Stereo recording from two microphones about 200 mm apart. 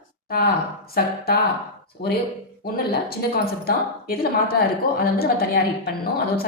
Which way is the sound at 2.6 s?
50° left (ahead or behind).